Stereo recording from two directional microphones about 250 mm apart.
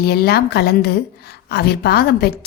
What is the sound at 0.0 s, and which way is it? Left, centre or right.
A woman's voice, left.